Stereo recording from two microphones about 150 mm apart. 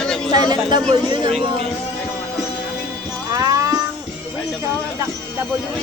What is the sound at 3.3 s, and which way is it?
Cat, 25° right (ahead or behind).